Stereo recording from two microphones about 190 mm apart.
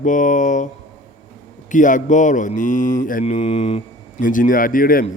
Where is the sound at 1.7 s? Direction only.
40° left (ahead or behind).